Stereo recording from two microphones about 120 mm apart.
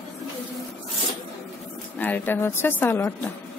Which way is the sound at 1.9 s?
15° left (ahead or behind).